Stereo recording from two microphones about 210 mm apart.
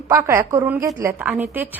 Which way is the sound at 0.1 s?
15° right (ahead or behind).